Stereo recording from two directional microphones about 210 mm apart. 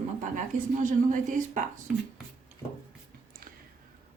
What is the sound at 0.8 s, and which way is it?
Speech, 40° right (ahead or behind).